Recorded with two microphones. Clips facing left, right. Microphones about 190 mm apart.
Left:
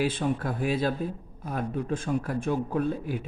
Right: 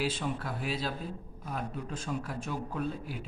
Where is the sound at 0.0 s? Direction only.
50° left (ahead or behind).